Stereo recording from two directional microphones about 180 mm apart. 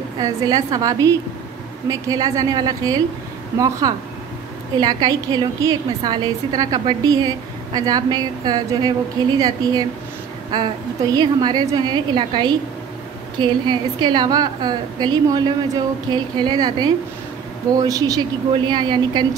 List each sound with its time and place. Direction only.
0.2 s a woman's voice: 20° right (ahead or behind)
11.1 s a woman's voice: 25° right (ahead or behind)